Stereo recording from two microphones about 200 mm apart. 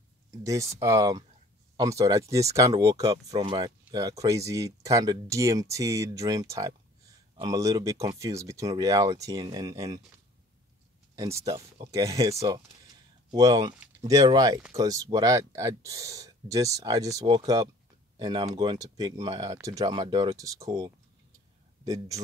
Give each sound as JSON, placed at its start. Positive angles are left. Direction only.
{"t": 0.3, "sound": "speech", "side_deg": -15}
{"t": 11.1, "sound": "speech", "side_deg": -15}